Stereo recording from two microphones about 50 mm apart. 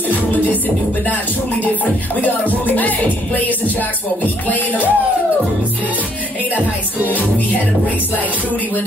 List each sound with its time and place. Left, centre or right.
0.1 s music: left
2.6 s music: left
4.2 s music: left